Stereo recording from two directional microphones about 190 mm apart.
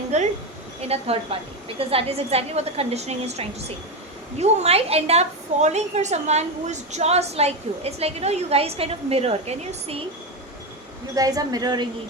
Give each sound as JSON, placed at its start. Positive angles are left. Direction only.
{"t": 0.1, "sound": "a woman's voice", "side_deg": -35}
{"t": 11.1, "sound": "a woman's voice", "side_deg": -20}